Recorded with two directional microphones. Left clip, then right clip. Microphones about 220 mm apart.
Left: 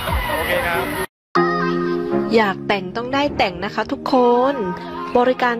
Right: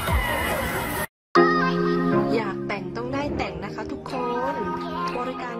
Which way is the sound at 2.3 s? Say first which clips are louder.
Left 9 dB; 30° left (ahead or behind).